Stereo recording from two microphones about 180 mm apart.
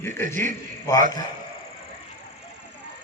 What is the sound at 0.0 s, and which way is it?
Speech, 15° left (ahead or behind).